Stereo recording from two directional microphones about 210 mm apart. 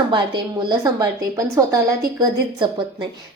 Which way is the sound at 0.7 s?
15° right (ahead or behind).